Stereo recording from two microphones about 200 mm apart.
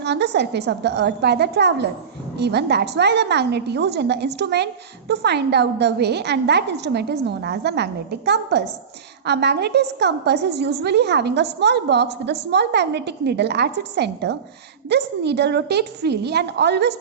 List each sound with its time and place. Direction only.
0.0 s a woman's voice: 60° right (ahead or behind)